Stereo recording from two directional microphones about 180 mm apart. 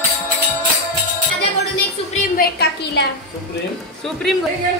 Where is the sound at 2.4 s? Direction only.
60° left (ahead or behind).